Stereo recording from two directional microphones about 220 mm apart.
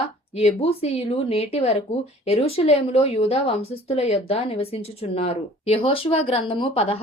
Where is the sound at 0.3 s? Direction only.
25° left (ahead or behind).